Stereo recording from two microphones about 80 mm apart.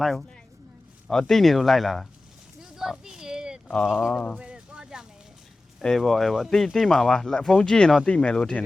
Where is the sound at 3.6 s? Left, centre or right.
Centre.